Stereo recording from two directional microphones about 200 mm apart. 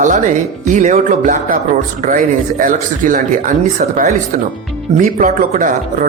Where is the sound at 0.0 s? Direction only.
40° right (ahead or behind).